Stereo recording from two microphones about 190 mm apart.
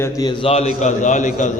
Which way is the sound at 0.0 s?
15° left (ahead or behind).